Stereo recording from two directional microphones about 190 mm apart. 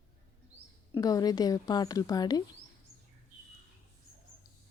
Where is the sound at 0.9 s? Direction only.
20° left (ahead or behind).